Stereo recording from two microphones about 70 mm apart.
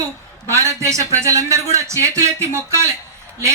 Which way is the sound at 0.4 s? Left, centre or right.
Right.